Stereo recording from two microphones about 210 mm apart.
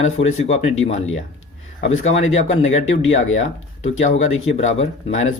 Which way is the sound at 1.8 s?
70° left (ahead or behind).